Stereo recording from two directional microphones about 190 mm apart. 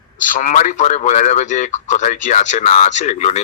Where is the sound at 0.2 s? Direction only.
45° left (ahead or behind).